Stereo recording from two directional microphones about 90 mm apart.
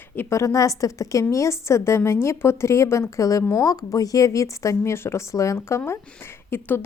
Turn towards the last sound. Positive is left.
turn(degrees=25)  # may be behind; listen again after turning